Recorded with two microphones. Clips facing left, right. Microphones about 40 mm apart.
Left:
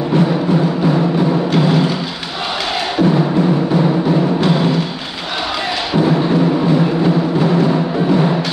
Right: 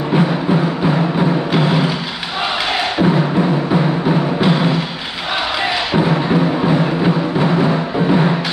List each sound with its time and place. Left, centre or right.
0.1 s music: centre
3.0 s music: centre
5.9 s music: centre